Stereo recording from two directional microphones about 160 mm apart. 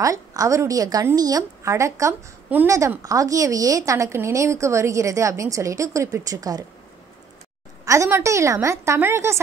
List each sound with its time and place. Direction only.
0.0 s a woman's voice: 20° right (ahead or behind)
7.8 s a woman's voice: 20° right (ahead or behind)